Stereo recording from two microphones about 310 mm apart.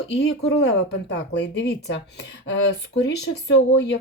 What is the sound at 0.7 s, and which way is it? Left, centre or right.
Speech, left.